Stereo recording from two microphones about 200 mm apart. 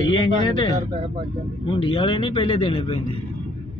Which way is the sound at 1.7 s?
25° left (ahead or behind).